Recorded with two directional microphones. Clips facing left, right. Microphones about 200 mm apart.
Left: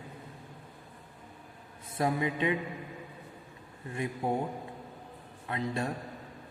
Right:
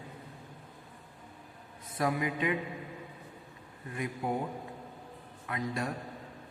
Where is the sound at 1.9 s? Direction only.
25° left (ahead or behind).